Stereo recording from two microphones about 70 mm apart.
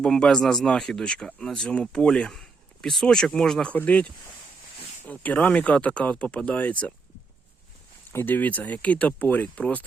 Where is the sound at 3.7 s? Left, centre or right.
Left.